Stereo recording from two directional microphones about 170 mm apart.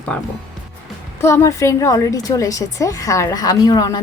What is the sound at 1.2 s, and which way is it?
A woman's voice, 15° left (ahead or behind).